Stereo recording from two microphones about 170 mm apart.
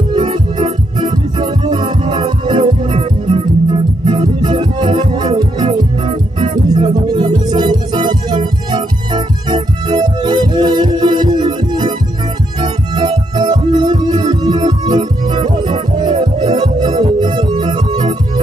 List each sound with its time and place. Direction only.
0.1 s music: 25° right (ahead or behind)